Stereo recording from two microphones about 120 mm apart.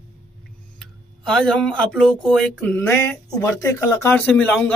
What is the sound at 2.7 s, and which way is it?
A man's voice, 15° left (ahead or behind).